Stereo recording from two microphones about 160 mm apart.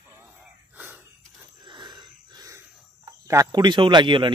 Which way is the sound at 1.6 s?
30° right (ahead or behind).